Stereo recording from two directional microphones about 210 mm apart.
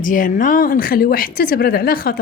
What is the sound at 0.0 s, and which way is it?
Speech, 40° left (ahead or behind).